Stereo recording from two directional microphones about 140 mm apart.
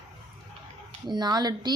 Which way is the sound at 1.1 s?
30° right (ahead or behind).